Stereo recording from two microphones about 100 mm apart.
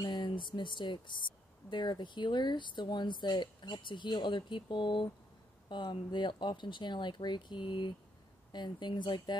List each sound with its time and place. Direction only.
0.0 s speech: 45° left (ahead or behind)